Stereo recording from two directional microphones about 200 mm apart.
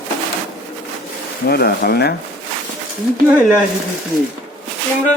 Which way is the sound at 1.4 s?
50° left (ahead or behind).